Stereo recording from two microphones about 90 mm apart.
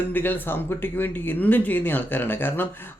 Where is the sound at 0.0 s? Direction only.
20° left (ahead or behind).